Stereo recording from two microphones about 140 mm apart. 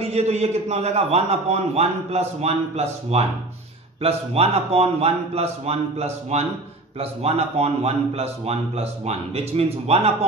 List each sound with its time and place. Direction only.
0.0 s a man's voice: 50° right (ahead or behind)